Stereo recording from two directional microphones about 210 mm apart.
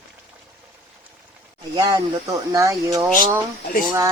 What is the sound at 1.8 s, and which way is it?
Speech, 15° right (ahead or behind).